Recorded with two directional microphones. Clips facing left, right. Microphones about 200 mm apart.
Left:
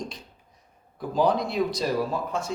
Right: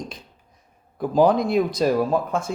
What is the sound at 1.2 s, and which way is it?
Speech, 50° right (ahead or behind).